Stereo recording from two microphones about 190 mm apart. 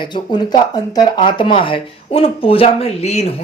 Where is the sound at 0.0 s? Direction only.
25° left (ahead or behind).